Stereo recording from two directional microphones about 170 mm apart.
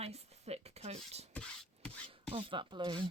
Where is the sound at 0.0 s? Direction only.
40° right (ahead or behind).